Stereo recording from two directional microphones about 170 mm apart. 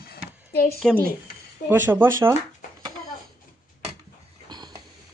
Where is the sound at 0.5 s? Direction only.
65° left (ahead or behind).